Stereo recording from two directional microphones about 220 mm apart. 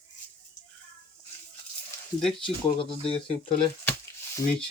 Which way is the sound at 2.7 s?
25° left (ahead or behind).